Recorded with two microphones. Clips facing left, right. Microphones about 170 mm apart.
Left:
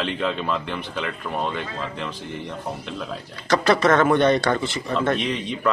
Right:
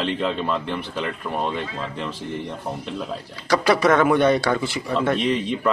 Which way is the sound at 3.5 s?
10° right (ahead or behind).